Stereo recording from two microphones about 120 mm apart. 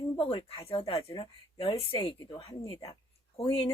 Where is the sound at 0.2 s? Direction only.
50° left (ahead or behind).